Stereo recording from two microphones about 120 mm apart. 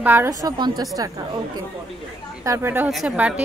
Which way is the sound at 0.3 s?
30° right (ahead or behind).